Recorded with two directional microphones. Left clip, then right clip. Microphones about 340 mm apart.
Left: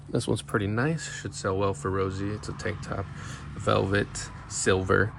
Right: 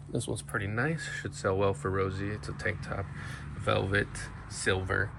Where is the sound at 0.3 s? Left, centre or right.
Centre.